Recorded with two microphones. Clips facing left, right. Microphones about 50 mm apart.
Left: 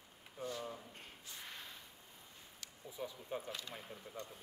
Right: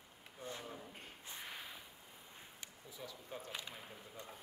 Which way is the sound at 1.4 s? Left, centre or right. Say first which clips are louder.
Right 2 dB; centre.